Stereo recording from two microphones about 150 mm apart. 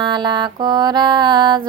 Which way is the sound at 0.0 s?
30° right (ahead or behind).